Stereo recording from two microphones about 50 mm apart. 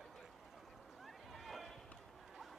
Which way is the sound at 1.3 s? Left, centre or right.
Centre.